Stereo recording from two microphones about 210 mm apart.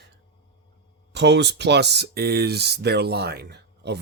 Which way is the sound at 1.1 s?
55° right (ahead or behind).